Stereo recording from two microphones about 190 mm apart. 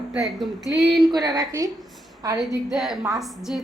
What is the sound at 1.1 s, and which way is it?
Speech, 20° right (ahead or behind).